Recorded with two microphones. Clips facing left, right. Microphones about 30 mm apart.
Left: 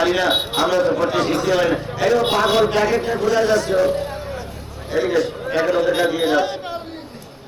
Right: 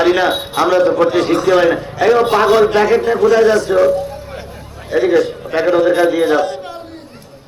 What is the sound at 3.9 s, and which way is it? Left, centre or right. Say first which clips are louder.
Speech: right 4 dB; left.